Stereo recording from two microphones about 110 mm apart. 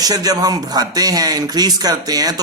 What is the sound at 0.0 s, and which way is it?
Speech, 35° right (ahead or behind).